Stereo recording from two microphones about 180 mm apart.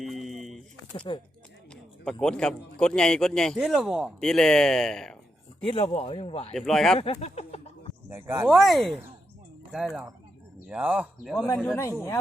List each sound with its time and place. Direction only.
0.0 s a sound: centre (ahead or behind)
0.9 s speech: 25° left (ahead or behind)
2.2 s a man's voice: 5° left (ahead or behind)
5.6 s speech: 30° left (ahead or behind)
6.5 s a man's voice: centre (ahead or behind)
7.0 s a sound: 35° left (ahead or behind)
8.1 s speech: 15° right (ahead or behind)
8.4 s a man's voice: centre (ahead or behind)
11.7 s a man's voice: 15° left (ahead or behind)